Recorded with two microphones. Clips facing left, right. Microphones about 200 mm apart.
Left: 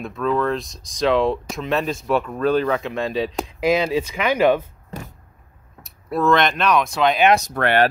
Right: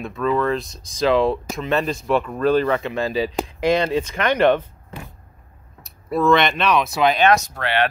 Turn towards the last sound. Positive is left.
turn(degrees=55)  # may be behind; listen again after turning